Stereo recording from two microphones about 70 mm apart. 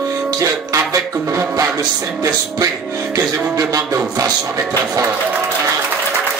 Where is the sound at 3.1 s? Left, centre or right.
Right.